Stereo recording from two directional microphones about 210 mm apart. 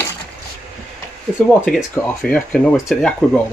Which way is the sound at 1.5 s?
10° left (ahead or behind).